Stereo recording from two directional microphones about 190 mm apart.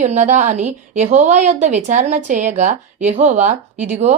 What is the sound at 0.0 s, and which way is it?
A woman's voice, 40° right (ahead or behind).